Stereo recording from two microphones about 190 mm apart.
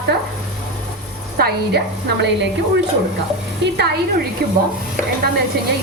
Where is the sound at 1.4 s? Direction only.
55° right (ahead or behind).